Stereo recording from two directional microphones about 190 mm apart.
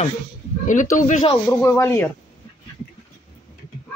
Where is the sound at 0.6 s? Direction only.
40° left (ahead or behind).